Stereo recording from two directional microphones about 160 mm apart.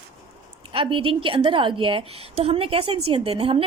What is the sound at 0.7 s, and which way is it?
A woman's voice, 35° right (ahead or behind).